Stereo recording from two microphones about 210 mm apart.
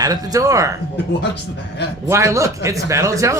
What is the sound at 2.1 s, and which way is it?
Speech, 15° right (ahead or behind).